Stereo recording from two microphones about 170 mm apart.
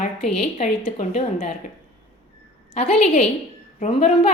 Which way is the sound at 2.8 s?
40° left (ahead or behind).